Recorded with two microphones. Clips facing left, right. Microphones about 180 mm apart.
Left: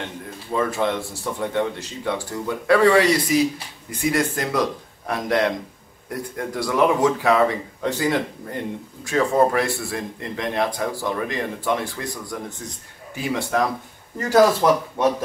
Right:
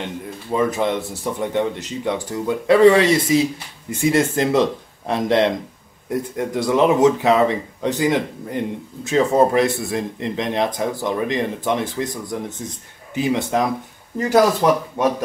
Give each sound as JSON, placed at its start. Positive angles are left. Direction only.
{"t": 0.5, "sound": "speech", "side_deg": -20}